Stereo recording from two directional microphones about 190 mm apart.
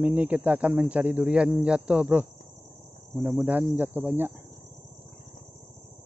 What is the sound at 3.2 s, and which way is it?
Speech, 10° right (ahead or behind).